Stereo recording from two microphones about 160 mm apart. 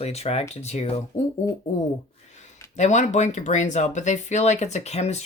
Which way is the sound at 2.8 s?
45° left (ahead or behind).